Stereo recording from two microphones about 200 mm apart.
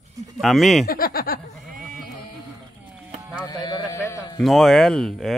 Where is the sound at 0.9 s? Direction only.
45° left (ahead or behind).